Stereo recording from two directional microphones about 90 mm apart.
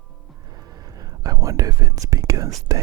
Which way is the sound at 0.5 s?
45° right (ahead or behind).